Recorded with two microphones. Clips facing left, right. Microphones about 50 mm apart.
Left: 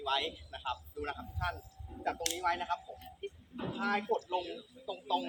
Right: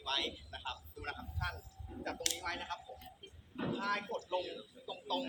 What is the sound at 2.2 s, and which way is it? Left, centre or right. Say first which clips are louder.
Speech: left 4 dB; left.